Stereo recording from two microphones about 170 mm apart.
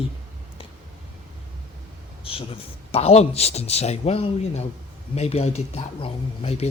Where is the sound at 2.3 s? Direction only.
35° left (ahead or behind).